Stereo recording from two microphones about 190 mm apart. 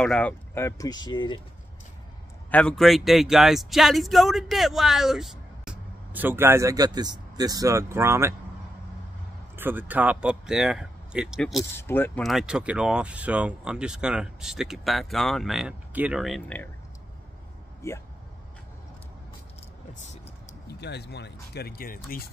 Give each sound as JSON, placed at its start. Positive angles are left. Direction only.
{"t": 0.0, "sound": "speech", "side_deg": 5}
{"t": 2.5, "sound": "speech", "side_deg": 5}
{"t": 9.6, "sound": "speech", "side_deg": -10}
{"t": 11.7, "sound": "speech", "side_deg": 10}
{"t": 12.2, "sound": "speech", "side_deg": 0}
{"t": 17.8, "sound": "speech", "side_deg": 15}
{"t": 19.9, "sound": "a sound", "side_deg": 40}
{"t": 20.8, "sound": "speech", "side_deg": 60}